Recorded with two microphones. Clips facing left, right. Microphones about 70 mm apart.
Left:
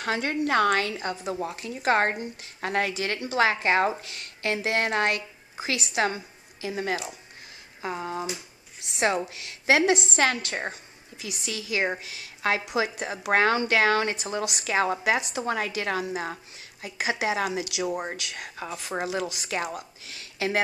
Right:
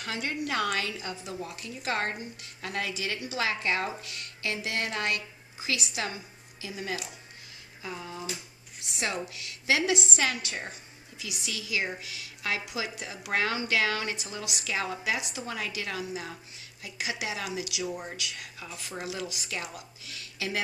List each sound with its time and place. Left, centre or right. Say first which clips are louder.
0.0 s a woman's voice: left 6 dB; left
9.3 s speech: left 6 dB; left